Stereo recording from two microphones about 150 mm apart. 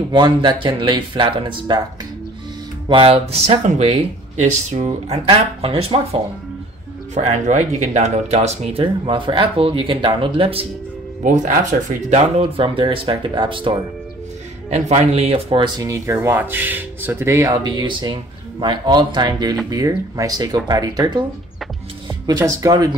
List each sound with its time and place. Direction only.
0.1 s speech: 30° right (ahead or behind)
2.9 s speech: 40° right (ahead or behind)
7.2 s speech: 50° right (ahead or behind)
11.2 s speech: 60° right (ahead or behind)
12.4 s speech: 35° right (ahead or behind)
14.7 s speech: 45° right (ahead or behind); by 21.2 s 25° right (ahead or behind)
22.2 s speech: 25° right (ahead or behind)